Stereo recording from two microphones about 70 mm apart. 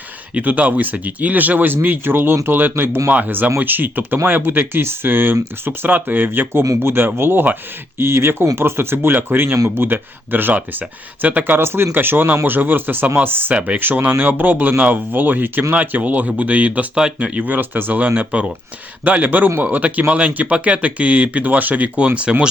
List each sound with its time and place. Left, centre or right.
0.3 s speech: right